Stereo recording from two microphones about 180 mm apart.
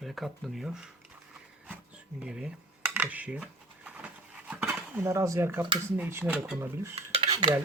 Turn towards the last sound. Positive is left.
turn(degrees=-25)  # may be behind; listen again after turning